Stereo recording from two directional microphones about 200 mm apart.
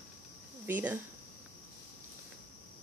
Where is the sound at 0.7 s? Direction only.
10° right (ahead or behind).